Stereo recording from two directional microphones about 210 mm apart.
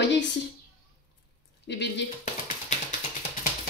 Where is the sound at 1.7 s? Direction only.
55° left (ahead or behind).